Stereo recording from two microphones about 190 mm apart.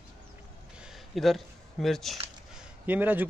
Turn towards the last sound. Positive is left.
turn(degrees=-10)  # may be behind; listen again after turning